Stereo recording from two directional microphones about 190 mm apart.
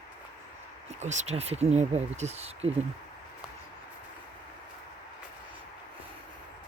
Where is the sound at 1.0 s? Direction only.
40° right (ahead or behind).